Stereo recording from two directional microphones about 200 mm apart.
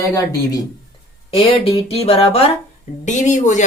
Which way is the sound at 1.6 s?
30° left (ahead or behind).